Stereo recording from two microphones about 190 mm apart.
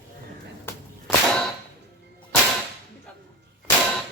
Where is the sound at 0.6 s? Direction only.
5° left (ahead or behind).